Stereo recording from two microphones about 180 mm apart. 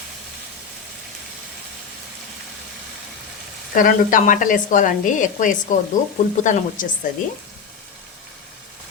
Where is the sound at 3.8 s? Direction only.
50° left (ahead or behind).